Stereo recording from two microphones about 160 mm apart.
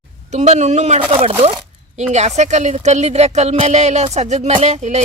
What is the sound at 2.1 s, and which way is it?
A woman's voice, 45° right (ahead or behind).